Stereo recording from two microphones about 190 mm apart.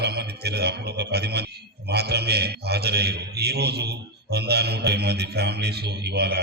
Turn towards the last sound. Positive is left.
turn(degrees=-60)  # may be behind; listen again after turning